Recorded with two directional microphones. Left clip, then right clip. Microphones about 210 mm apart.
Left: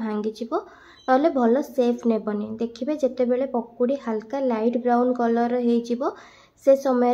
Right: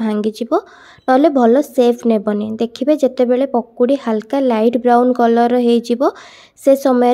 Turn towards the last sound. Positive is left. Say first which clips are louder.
# right 6 dB
turn(degrees=-35)  # may be behind; listen again after turning